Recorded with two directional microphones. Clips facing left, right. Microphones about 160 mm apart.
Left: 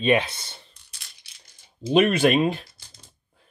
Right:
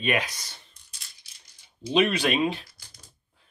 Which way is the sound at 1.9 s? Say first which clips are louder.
Left 5 dB; 50° left (ahead or behind).